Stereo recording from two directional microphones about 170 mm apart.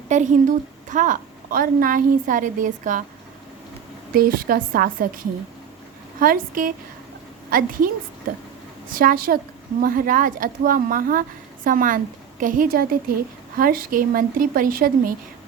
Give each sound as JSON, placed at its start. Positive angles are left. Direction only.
{"t": 0.1, "sound": "a woman's voice", "side_deg": -45}
{"t": 4.1, "sound": "a woman's voice", "side_deg": -60}
{"t": 9.0, "sound": "a woman's voice", "side_deg": -55}